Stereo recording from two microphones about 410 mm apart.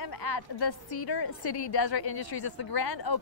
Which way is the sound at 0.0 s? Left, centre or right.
Left.